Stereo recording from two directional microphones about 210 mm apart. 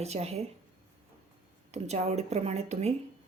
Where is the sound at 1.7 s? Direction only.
30° right (ahead or behind).